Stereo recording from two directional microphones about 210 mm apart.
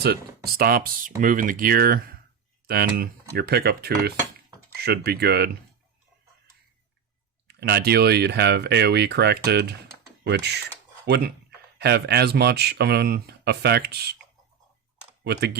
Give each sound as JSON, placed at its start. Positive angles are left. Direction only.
{"t": 0.0, "sound": "speech", "side_deg": -45}
{"t": 7.4, "sound": "speech", "side_deg": -50}
{"t": 15.2, "sound": "speech", "side_deg": -50}